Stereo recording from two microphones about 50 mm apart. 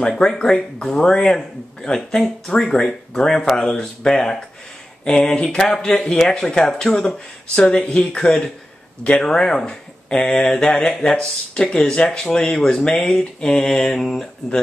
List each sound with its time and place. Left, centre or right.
0.1 s speech: centre